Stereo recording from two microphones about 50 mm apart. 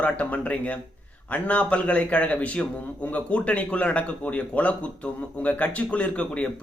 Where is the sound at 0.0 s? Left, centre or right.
Left.